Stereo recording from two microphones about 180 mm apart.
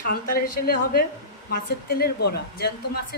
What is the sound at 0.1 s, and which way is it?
A woman's voice, 50° left (ahead or behind).